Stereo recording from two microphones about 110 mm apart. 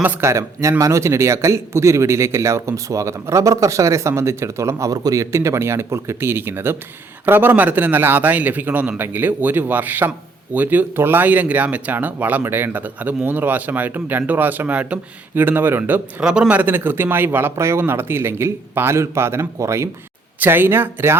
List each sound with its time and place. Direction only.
0.0 s a man's voice: 15° right (ahead or behind)
0.3 s a man's voice: 25° right (ahead or behind)
16.2 s a man's voice: 5° right (ahead or behind)